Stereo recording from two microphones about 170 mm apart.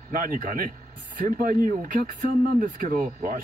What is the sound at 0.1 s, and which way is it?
Speech, 50° right (ahead or behind).